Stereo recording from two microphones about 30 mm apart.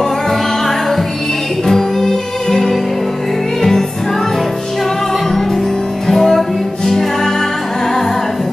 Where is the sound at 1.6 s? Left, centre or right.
Centre.